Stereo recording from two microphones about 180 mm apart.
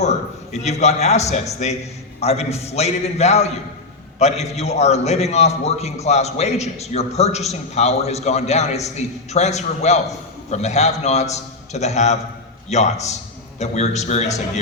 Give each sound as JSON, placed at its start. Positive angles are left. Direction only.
{"t": 0.0, "sound": "a man's voice", "side_deg": 40}